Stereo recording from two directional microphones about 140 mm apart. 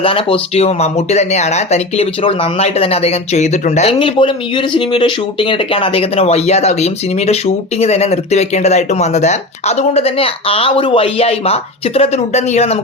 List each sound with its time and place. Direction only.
0.0 s speech: 40° left (ahead or behind); by 3.9 s 55° left (ahead or behind)
3.9 s speech: 35° left (ahead or behind)